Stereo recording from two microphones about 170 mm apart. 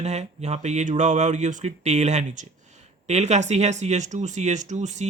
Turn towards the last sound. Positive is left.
turn(degrees=-45)  # may be behind; listen again after turning